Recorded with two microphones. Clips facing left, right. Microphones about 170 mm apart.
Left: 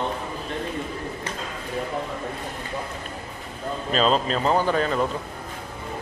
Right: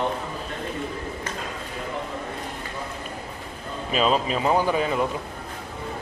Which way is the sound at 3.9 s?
5° right (ahead or behind).